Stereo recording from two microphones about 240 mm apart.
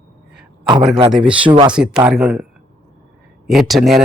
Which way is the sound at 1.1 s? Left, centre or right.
Centre.